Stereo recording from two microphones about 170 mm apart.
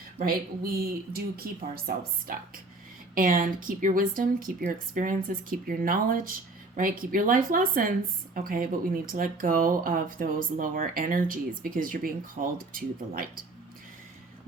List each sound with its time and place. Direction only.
0.2 s a woman's voice: 60° right (ahead or behind)